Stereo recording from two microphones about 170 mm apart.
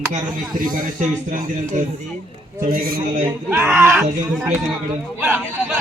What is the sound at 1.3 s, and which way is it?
Speech, 45° right (ahead or behind).